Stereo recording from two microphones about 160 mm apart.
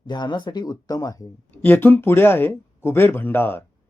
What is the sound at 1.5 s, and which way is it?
Speech, 10° left (ahead or behind).